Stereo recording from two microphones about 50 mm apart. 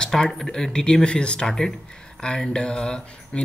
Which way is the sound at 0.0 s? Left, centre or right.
Centre.